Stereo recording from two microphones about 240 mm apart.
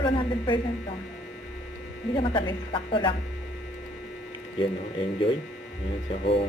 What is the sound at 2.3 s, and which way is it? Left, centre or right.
Speech, left.